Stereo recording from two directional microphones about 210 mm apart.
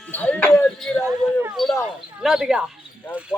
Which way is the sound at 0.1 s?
5° left (ahead or behind).